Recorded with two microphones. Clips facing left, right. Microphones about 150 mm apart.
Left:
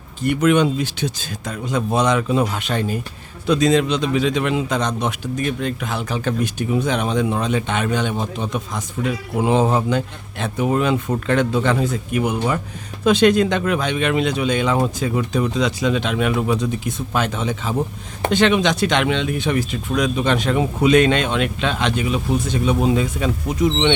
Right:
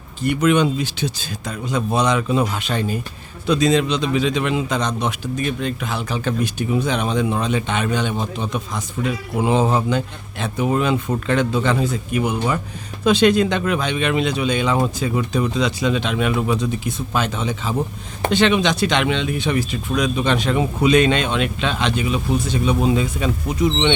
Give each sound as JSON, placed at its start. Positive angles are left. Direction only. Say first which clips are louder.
{"t": 0.2, "sound": "a man's voice", "louder": "left 1 dB", "side_deg": 50}